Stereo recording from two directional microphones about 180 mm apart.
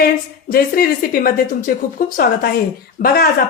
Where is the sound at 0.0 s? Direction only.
55° left (ahead or behind).